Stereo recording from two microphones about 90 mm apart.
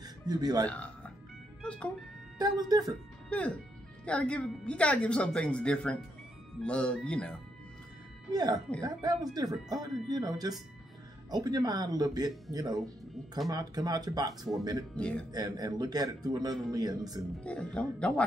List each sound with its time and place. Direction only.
0.0 s speech: 45° right (ahead or behind)
0.7 s music: 15° left (ahead or behind)
2.3 s speech: 45° right (ahead or behind)
3.3 s speech: 15° left (ahead or behind)
8.3 s speech: 45° right (ahead or behind)
15.0 s speech: 10° left (ahead or behind)
15.3 s speech: 45° right (ahead or behind)
17.4 s speech: 15° left (ahead or behind)